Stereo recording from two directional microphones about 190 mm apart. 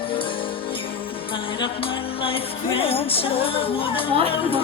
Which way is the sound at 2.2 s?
30° left (ahead or behind).